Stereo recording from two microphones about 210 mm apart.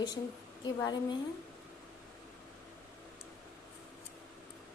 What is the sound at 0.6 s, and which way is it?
Speech, 20° left (ahead or behind).